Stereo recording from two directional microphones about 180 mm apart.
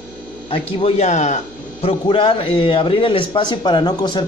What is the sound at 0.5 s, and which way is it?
Speech, 30° left (ahead or behind).